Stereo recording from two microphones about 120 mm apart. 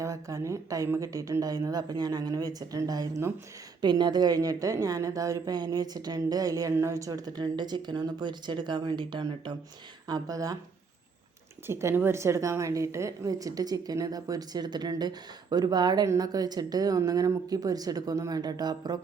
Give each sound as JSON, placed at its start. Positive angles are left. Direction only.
{"t": 0.0, "sound": "speech", "side_deg": -25}
{"t": 3.8, "sound": "a woman's voice", "side_deg": -40}
{"t": 10.1, "sound": "speech", "side_deg": -30}
{"t": 11.6, "sound": "a woman's voice", "side_deg": -20}